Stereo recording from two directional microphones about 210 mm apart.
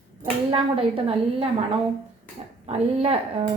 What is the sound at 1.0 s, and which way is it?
A woman's voice, 25° right (ahead or behind).